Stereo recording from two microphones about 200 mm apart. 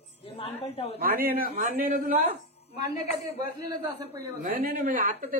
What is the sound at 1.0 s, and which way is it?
A man's voice, 45° right (ahead or behind).